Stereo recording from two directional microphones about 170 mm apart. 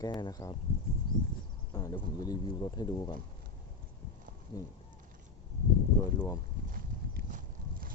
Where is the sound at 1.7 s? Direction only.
20° left (ahead or behind).